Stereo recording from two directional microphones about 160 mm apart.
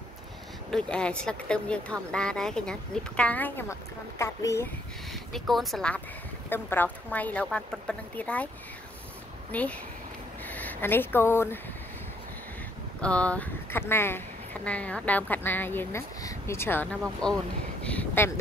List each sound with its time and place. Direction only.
0.7 s speech: 5° left (ahead or behind)
5.1 s speech: centre (ahead or behind)
9.5 s speech: 10° left (ahead or behind)
13.0 s speech: 5° left (ahead or behind)